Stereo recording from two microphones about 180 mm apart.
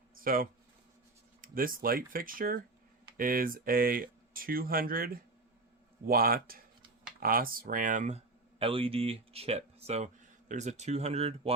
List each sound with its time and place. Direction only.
0.2 s speech: 50° right (ahead or behind); by 11.5 s 35° right (ahead or behind)